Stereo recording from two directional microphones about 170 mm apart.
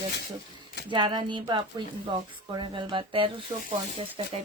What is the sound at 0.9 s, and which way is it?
Speech, 25° right (ahead or behind).